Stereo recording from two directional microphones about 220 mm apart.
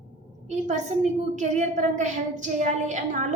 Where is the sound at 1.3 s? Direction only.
35° right (ahead or behind).